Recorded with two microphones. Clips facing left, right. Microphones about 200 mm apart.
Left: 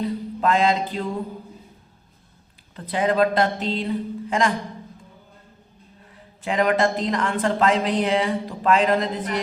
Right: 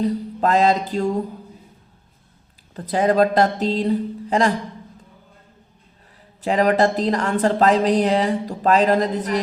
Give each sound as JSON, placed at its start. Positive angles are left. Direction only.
{"t": 0.0, "sound": "speech", "side_deg": -40}
{"t": 2.7, "sound": "speech", "side_deg": -40}
{"t": 6.4, "sound": "speech", "side_deg": -35}